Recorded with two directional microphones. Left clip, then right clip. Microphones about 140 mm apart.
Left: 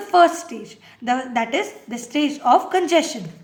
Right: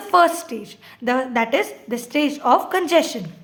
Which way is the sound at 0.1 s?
40° right (ahead or behind).